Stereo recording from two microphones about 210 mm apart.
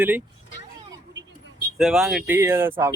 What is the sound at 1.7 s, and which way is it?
Speech, centre (ahead or behind).